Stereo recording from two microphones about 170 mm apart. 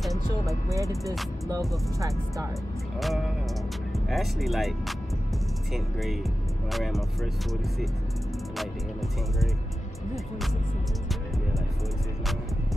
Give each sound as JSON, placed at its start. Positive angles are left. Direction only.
{"t": 0.5, "sound": "speech", "side_deg": -20}
{"t": 2.0, "sound": "speech", "side_deg": -20}
{"t": 3.0, "sound": "speech", "side_deg": 0}